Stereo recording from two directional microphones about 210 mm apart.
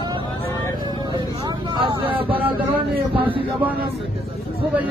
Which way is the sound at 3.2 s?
25° right (ahead or behind).